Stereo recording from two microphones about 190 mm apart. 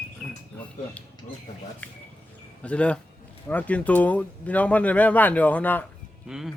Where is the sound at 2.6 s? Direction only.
5° left (ahead or behind).